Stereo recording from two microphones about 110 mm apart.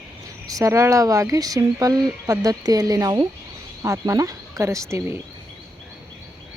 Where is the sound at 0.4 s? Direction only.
30° right (ahead or behind).